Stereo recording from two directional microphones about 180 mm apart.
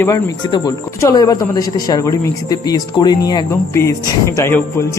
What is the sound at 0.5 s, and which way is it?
A man's voice, 20° left (ahead or behind).